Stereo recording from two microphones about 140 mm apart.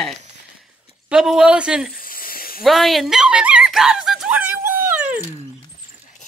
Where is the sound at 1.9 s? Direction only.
90° left.